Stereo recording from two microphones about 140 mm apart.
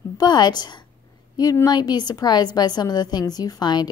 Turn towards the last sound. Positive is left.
turn(degrees=30)  # may be behind; listen again after turning